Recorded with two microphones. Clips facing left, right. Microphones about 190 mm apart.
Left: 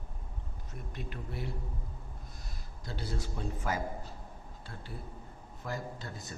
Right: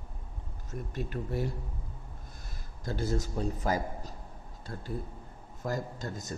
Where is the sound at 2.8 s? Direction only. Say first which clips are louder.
Right 7 dB; 45° right (ahead or behind).